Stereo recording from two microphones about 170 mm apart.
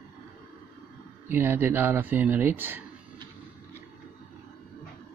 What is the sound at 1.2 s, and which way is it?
Speech, 10° right (ahead or behind).